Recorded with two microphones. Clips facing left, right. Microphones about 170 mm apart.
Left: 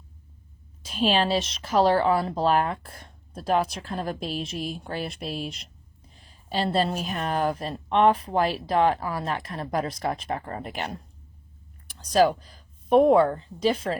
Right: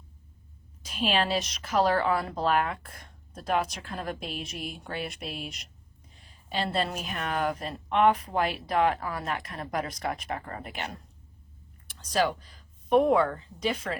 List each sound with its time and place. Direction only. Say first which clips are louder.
0.9 s a woman's voice: left 4 dB; 30° left (ahead or behind)